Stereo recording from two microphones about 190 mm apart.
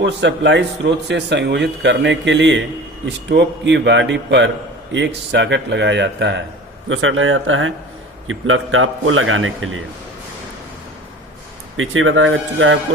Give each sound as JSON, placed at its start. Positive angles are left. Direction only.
{"t": 0.0, "sound": "speech", "side_deg": -70}
{"t": 6.8, "sound": "a man's voice", "side_deg": -90}
{"t": 11.8, "sound": "a man's voice", "side_deg": -90}